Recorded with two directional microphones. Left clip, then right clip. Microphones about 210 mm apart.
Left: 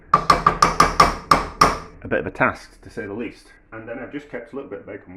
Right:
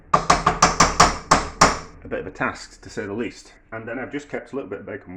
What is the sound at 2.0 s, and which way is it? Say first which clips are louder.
Speech: left 6 dB; 45° left (ahead or behind).